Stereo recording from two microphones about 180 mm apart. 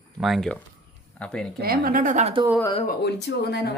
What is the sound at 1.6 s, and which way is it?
Speech, 55° right (ahead or behind).